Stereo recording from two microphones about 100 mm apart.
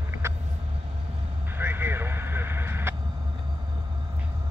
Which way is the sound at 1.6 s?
20° right (ahead or behind).